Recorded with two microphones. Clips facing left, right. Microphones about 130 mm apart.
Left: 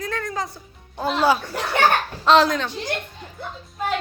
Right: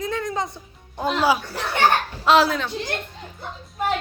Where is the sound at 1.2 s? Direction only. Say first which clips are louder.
Left 2 dB; 10° right (ahead or behind).